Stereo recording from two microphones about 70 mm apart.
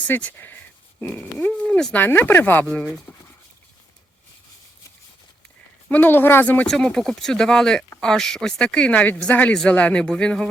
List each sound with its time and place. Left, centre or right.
0.0 s speech: left
0.3 s speech: left; by 2.0 s centre
2.0 s speech: left
3.1 s a sound: left
5.9 s speech: left
6.7 s speech: centre